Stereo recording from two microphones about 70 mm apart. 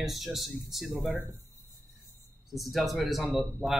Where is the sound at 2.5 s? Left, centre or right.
Centre.